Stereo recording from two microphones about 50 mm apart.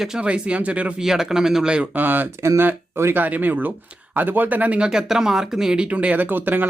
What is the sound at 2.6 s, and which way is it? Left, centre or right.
Speech, right.